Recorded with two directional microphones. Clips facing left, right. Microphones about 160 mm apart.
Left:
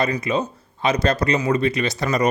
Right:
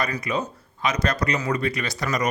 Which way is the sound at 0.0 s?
25° left (ahead or behind).